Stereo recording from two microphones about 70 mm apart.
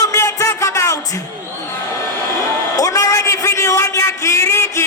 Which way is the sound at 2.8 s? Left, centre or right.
Left.